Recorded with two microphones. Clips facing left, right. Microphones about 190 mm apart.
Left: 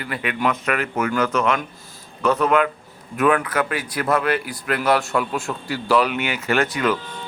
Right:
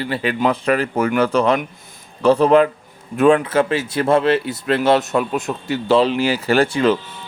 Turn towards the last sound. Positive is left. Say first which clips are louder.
# right 5 dB
turn(degrees=-30)  # may be behind; listen again after turning